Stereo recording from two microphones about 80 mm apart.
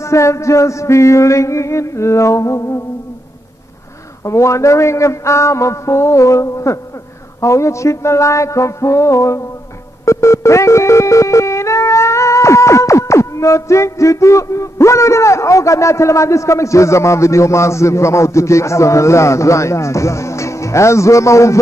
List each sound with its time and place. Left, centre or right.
0.0 s music: left
4.2 s music: left